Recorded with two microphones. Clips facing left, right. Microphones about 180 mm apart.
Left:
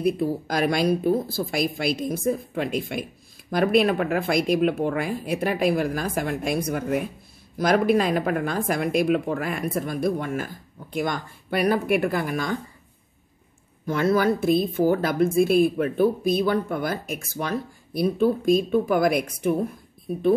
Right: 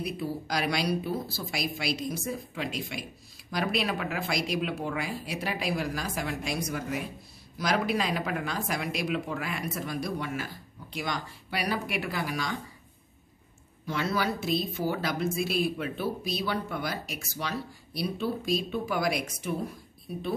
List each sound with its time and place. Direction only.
0.0 s speech: 50° left (ahead or behind)
13.8 s speech: 50° left (ahead or behind)